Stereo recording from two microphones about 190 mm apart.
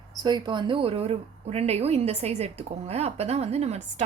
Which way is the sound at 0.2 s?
20° right (ahead or behind).